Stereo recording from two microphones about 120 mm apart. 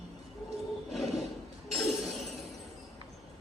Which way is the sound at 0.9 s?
Centre (ahead or behind).